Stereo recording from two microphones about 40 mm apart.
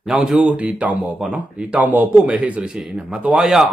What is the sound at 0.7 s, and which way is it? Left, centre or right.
Speech, right.